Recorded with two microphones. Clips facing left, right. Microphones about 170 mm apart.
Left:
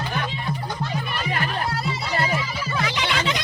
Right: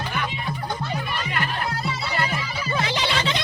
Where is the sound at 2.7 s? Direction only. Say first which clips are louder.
Right 2 dB; 25° right (ahead or behind).